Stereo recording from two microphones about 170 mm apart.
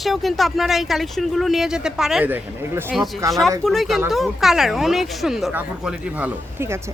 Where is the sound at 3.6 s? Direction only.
Centre (ahead or behind).